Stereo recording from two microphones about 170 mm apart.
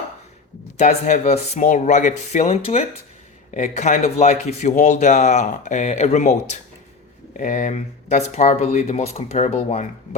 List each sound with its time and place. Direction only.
0.8 s a man's voice: 45° left (ahead or behind)